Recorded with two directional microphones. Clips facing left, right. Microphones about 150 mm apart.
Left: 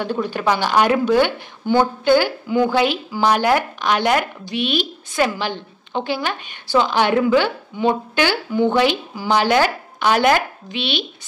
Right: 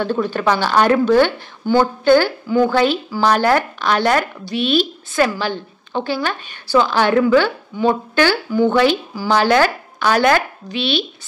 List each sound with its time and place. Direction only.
0.0 s a woman's voice: 15° left (ahead or behind)